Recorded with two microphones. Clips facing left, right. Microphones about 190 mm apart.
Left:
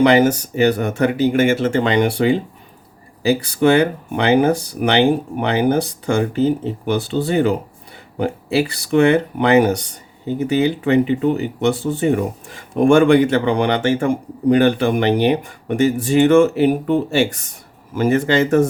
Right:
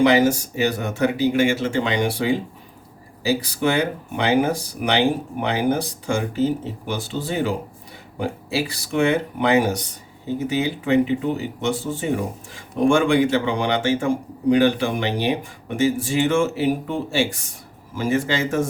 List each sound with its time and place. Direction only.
0.0 s speech: 55° left (ahead or behind)